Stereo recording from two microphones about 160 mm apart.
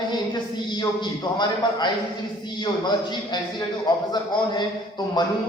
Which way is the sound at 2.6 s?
30° left (ahead or behind).